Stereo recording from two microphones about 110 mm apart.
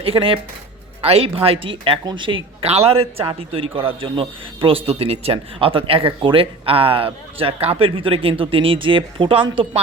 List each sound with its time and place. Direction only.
0.0 s a man's voice: 55° right (ahead or behind)